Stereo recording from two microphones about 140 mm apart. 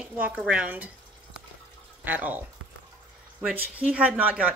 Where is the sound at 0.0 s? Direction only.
10° right (ahead or behind).